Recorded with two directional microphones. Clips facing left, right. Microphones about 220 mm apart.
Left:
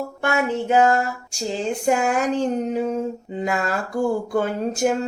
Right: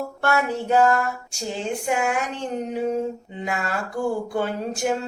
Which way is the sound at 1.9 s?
40° left (ahead or behind).